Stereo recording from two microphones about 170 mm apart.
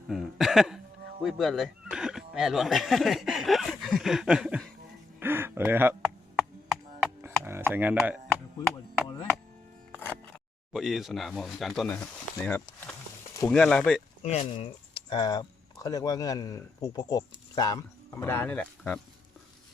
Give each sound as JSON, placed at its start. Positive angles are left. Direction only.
{"t": 0.1, "sound": "speech", "side_deg": 0}
{"t": 5.2, "sound": "a sound", "side_deg": -10}
{"t": 10.0, "sound": "music", "side_deg": 10}
{"t": 10.7, "sound": "speech", "side_deg": 0}
{"t": 11.9, "sound": "a sound", "side_deg": 15}
{"t": 13.5, "sound": "speech", "side_deg": 5}
{"t": 14.2, "sound": "speech", "side_deg": 40}